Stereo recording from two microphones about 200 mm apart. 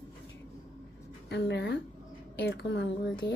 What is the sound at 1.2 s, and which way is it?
Speech, 60° left (ahead or behind).